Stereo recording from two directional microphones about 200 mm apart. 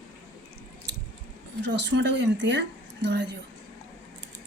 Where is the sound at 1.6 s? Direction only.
60° right (ahead or behind).